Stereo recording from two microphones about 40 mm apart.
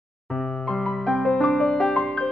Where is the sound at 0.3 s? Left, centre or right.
Centre.